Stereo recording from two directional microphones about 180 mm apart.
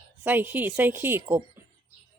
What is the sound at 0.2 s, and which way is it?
A woman's voice, 10° right (ahead or behind).